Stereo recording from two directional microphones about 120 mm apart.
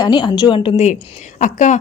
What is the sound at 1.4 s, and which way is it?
Speech, 90° left.